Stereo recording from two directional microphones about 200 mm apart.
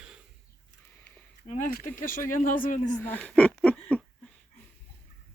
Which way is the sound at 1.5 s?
40° left (ahead or behind).